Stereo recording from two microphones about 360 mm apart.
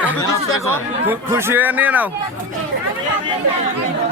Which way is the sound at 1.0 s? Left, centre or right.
Centre.